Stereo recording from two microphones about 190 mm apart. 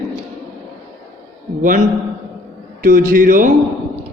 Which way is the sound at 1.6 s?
45° right (ahead or behind).